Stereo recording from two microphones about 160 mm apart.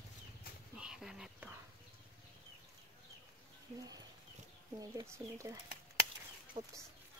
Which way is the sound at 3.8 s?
25° right (ahead or behind).